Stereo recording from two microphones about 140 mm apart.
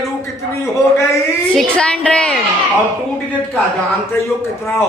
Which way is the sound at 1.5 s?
5° left (ahead or behind).